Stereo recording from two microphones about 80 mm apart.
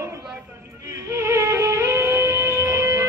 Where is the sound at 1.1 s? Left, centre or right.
Right.